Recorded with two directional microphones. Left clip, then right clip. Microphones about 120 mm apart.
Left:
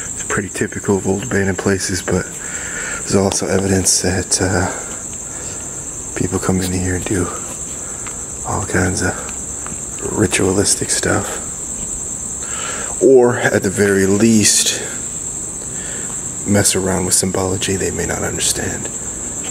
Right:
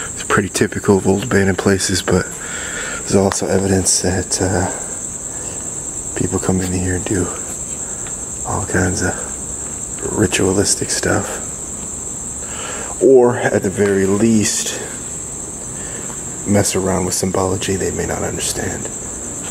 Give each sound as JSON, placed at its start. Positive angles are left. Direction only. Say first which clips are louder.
{"t": 0.3, "sound": "speech", "louder": "right 5 dB", "side_deg": -35}
{"t": 6.1, "sound": "speech", "louder": "even", "side_deg": 5}
{"t": 8.5, "sound": "speech", "louder": "even", "side_deg": 5}
{"t": 12.5, "sound": "speech", "louder": "left 1 dB", "side_deg": 10}
{"t": 16.4, "sound": "speech", "louder": "even", "side_deg": 5}